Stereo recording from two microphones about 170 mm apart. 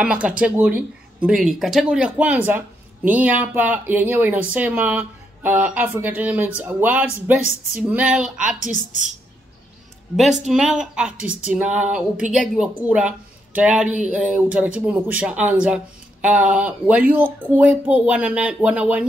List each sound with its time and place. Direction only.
0.0 s speech: 5° right (ahead or behind)
8.5 s a woman's voice: 45° left (ahead or behind)
10.1 s speech: centre (ahead or behind)